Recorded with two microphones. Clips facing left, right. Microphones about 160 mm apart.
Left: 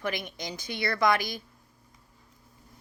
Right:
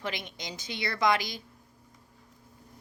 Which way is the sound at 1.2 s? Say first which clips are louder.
Left 3 dB; 50° left (ahead or behind).